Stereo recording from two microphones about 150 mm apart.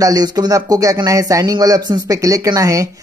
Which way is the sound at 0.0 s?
25° right (ahead or behind).